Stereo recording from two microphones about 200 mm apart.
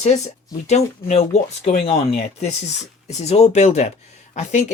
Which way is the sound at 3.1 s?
30° left (ahead or behind).